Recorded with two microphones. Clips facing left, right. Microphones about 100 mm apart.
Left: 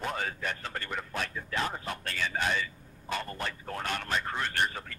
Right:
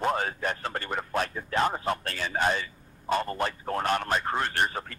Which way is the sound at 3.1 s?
40° right (ahead or behind).